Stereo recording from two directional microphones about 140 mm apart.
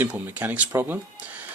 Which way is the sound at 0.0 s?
15° right (ahead or behind).